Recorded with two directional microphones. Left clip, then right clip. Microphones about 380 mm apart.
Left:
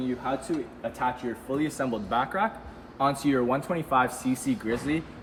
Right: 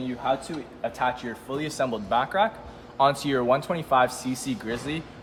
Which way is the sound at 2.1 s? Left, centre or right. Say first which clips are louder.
Right 4 dB; centre.